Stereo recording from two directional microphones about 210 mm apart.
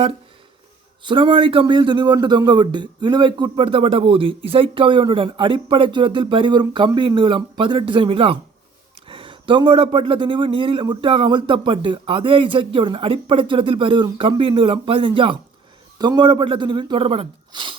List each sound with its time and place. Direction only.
1.0 s speech: 25° right (ahead or behind)